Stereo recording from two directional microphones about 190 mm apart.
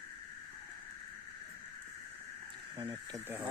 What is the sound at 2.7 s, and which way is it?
Speech, 25° right (ahead or behind).